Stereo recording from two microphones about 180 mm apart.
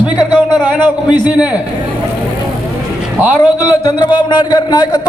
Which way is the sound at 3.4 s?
25° left (ahead or behind).